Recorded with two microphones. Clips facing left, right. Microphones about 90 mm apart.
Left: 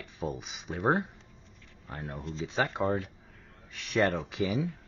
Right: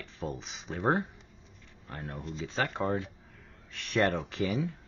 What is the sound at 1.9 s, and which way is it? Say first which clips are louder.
Speech: left 1 dB; centre (ahead or behind).